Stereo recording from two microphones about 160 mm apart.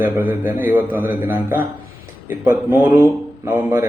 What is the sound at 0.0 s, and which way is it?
A man's voice, 10° right (ahead or behind).